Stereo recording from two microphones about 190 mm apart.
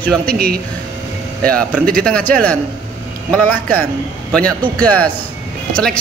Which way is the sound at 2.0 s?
5° left (ahead or behind).